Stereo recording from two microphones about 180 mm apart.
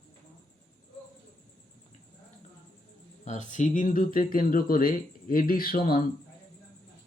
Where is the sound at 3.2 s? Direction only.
40° left (ahead or behind).